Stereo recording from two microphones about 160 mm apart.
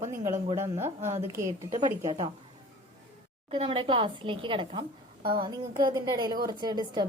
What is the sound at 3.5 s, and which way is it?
A woman's voice, 35° right (ahead or behind).